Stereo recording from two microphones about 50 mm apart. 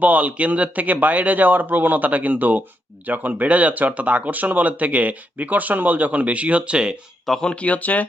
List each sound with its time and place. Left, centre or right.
0.0 s speech: right
7.3 s speech: centre
7.5 s speech: left